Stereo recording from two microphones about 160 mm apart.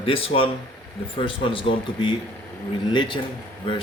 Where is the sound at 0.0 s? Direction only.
35° left (ahead or behind).